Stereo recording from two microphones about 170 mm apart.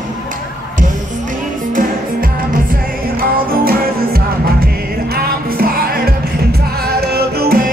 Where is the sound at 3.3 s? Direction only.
60° right (ahead or behind).